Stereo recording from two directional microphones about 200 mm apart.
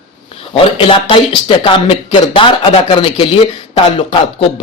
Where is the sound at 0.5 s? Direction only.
25° left (ahead or behind).